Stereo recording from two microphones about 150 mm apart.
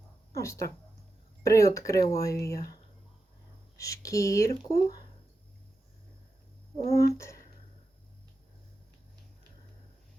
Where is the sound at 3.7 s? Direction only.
20° left (ahead or behind).